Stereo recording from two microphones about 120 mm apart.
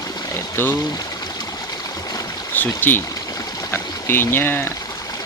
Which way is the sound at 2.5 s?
15° left (ahead or behind).